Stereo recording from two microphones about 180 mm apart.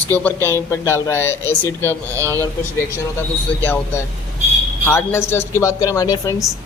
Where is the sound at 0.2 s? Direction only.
10° left (ahead or behind).